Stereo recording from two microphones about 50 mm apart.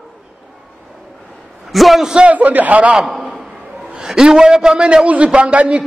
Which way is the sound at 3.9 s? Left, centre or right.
Centre.